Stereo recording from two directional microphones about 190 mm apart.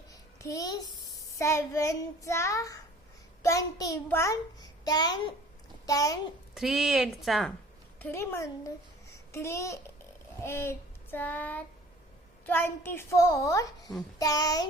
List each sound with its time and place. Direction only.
0.1 s a child's voice: 15° left (ahead or behind)
6.5 s speech: centre (ahead or behind)
7.9 s a child's voice: 10° left (ahead or behind)